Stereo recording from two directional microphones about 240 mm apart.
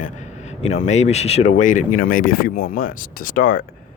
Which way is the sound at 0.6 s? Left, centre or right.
Left.